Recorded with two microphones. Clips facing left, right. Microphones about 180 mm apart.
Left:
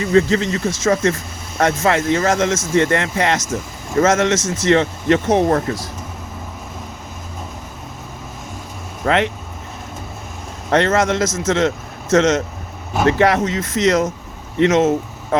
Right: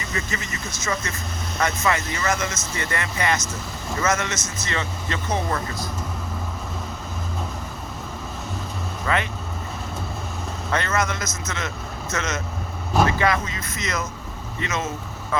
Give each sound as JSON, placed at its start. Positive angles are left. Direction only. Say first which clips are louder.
{"t": 0.0, "sound": "speech", "louder": "left 15 dB", "side_deg": 75}
{"t": 1.9, "sound": "speech", "louder": "left 8 dB", "side_deg": 90}
{"t": 9.0, "sound": "speech", "louder": "left 8 dB", "side_deg": 85}
{"t": 10.7, "sound": "speech", "louder": "left 9 dB", "side_deg": 90}
{"t": 13.1, "sound": "speech", "louder": "left 8 dB", "side_deg": 75}